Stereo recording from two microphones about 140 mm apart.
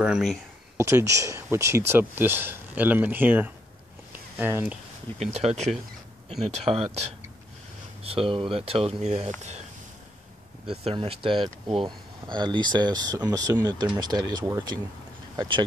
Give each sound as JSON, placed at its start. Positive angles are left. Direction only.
{"t": 0.0, "sound": "speech", "side_deg": 0}
{"t": 0.7, "sound": "speech", "side_deg": -20}
{"t": 5.2, "sound": "speech", "side_deg": -50}
{"t": 8.0, "sound": "speech", "side_deg": -40}
{"t": 10.7, "sound": "speech", "side_deg": -45}